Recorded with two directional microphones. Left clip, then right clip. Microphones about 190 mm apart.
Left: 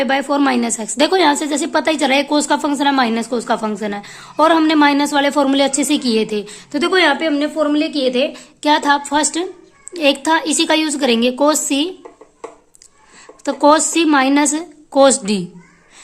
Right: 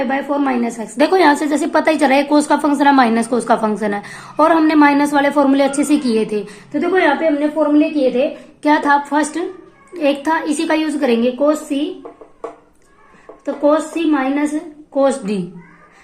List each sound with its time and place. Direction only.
0.0 s a woman's voice: 35° left (ahead or behind)
6.7 s a woman's voice: 40° left (ahead or behind)
13.4 s a woman's voice: 50° left (ahead or behind)
14.9 s a woman's voice: 40° left (ahead or behind)